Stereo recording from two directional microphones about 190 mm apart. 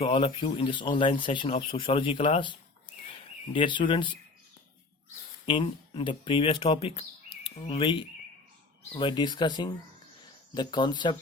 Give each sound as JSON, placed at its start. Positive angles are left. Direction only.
{"t": 0.0, "sound": "speech", "side_deg": 30}
{"t": 5.5, "sound": "speech", "side_deg": 25}
{"t": 9.0, "sound": "speech", "side_deg": 25}